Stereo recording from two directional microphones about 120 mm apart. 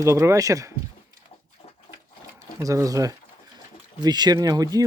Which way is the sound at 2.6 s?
30° right (ahead or behind).